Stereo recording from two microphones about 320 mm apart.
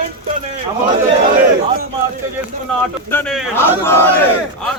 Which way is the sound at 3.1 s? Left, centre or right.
Centre.